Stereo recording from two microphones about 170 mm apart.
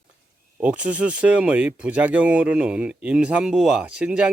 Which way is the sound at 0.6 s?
5° right (ahead or behind).